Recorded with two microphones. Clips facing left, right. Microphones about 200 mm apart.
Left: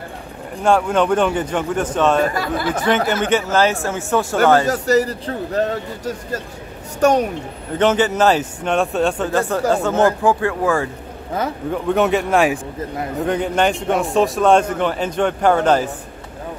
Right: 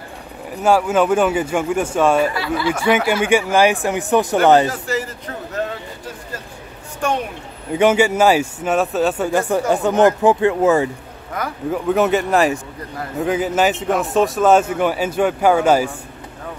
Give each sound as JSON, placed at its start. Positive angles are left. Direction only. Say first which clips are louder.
{"t": 0.6, "sound": "a man's voice", "louder": "right 1 dB", "side_deg": -5}
{"t": 2.3, "sound": "speech", "louder": "right 1 dB", "side_deg": 50}
{"t": 2.7, "sound": "a man's voice", "louder": "right 1 dB", "side_deg": -10}
{"t": 4.6, "sound": "a man's voice", "louder": "left 7 dB", "side_deg": 40}
{"t": 7.7, "sound": "a man's voice", "louder": "right 2 dB", "side_deg": -10}
{"t": 9.3, "sound": "a man's voice", "louder": "even", "side_deg": -15}
{"t": 11.4, "sound": "a man's voice", "louder": "left 3 dB", "side_deg": 25}
{"t": 11.7, "sound": "a man's voice", "louder": "right 1 dB", "side_deg": 0}